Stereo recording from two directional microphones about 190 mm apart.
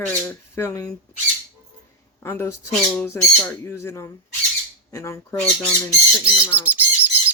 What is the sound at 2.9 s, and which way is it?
Squawk, 10° left (ahead or behind).